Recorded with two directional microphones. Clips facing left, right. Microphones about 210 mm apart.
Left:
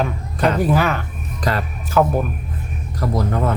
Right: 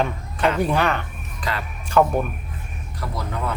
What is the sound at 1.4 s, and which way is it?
Speech, 40° left (ahead or behind).